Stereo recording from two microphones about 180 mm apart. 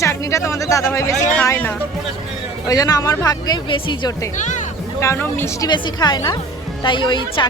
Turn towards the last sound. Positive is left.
turn(degrees=25)  # may be behind; listen again after turning